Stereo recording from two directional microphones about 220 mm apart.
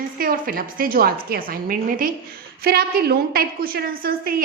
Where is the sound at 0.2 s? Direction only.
40° right (ahead or behind).